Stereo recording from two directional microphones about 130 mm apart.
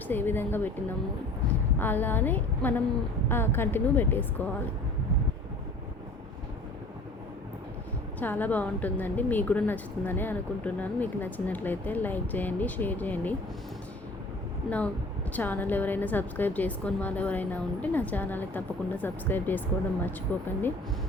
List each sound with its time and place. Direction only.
0.1 s a woman's voice: 15° left (ahead or behind)
1.8 s a woman's voice: 15° left (ahead or behind)
8.2 s a woman's voice: 15° left (ahead or behind)
15.3 s a woman's voice: 15° left (ahead or behind)